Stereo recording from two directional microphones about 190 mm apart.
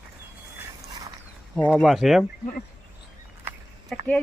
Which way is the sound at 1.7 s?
Centre (ahead or behind).